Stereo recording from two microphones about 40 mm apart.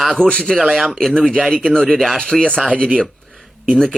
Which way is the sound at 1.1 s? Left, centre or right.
Left.